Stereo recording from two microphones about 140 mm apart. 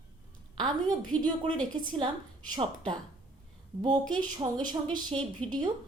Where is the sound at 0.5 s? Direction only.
30° right (ahead or behind).